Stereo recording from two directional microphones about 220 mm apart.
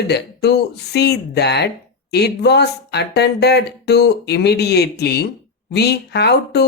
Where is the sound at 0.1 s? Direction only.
50° left (ahead or behind).